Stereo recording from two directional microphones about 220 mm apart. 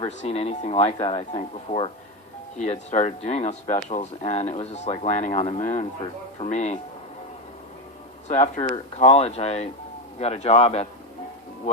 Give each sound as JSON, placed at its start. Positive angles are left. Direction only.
{"t": 0.0, "sound": "speech", "side_deg": 30}
{"t": 8.3, "sound": "speech", "side_deg": 35}